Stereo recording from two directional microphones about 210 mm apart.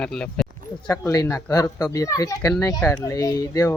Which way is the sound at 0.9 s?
15° left (ahead or behind).